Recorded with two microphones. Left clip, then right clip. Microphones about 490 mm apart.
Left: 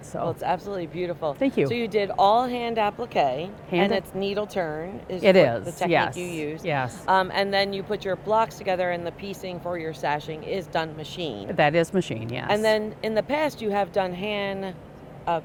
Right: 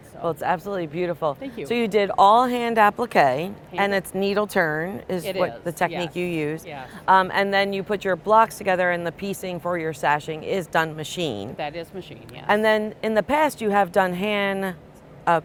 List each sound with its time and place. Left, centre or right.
0.3 s a woman's voice: right
5.2 s speech: left
6.1 s a woman's voice: right
11.5 s speech: left
12.5 s speech: right